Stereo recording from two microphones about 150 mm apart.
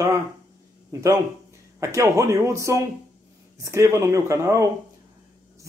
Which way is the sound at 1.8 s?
20° right (ahead or behind).